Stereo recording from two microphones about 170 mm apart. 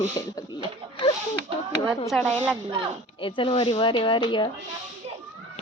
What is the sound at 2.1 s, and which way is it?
Speech, 5° left (ahead or behind).